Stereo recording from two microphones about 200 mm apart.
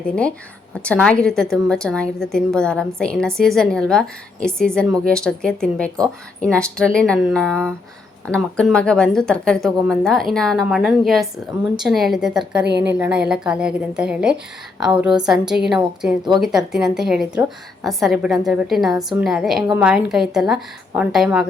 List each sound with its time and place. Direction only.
0.0 s speech: 5° left (ahead or behind)
12.6 s a woman's voice: 55° right (ahead or behind)
13.0 s speech: 5° right (ahead or behind)